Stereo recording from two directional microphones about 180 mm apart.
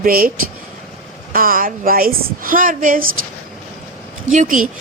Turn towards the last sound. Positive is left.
turn(degrees=-45)  # may be behind; listen again after turning